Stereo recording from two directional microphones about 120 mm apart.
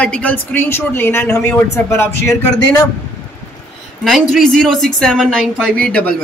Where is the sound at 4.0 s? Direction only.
Centre (ahead or behind).